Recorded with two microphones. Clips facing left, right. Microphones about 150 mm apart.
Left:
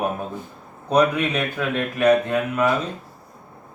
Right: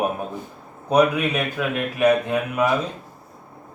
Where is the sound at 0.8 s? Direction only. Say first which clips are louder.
Right 1 dB; 10° right (ahead or behind).